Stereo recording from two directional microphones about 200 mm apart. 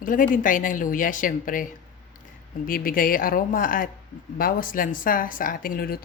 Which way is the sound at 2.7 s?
45° left (ahead or behind).